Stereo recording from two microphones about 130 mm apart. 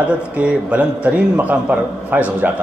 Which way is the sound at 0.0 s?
10° right (ahead or behind).